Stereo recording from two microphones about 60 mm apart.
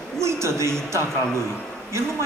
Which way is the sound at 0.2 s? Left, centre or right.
Right.